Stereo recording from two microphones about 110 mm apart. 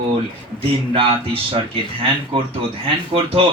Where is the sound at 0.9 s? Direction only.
55° right (ahead or behind).